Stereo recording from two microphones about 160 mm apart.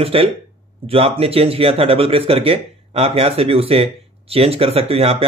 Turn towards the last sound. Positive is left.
turn(degrees=-35)  # may be behind; listen again after turning